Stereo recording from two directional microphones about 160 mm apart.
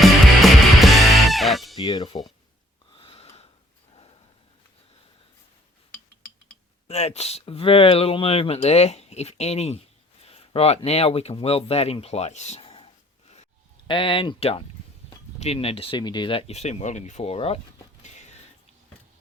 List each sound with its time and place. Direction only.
0.0 s music: centre (ahead or behind)
1.8 s speech: 25° left (ahead or behind)
2.9 s snort: 35° left (ahead or behind)
6.8 s speech: 40° left (ahead or behind)
18.0 s a sound: 45° left (ahead or behind)